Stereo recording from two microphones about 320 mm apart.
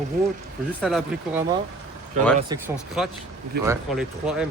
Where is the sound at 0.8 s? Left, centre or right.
Centre.